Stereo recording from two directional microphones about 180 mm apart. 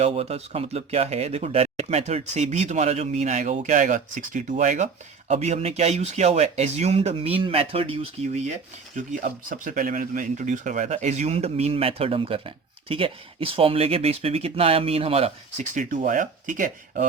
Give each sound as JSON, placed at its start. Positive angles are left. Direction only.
{"t": 0.0, "sound": "speech", "side_deg": -35}
{"t": 9.0, "sound": "speech", "side_deg": -50}